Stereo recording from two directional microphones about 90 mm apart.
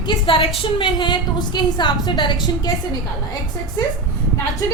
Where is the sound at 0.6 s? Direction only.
65° left (ahead or behind).